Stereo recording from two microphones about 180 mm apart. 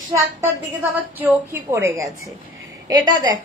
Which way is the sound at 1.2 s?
10° right (ahead or behind).